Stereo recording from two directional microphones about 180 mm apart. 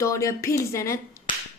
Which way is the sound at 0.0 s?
15° left (ahead or behind).